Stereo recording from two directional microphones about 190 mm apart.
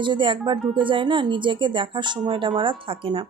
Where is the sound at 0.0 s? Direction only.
25° right (ahead or behind).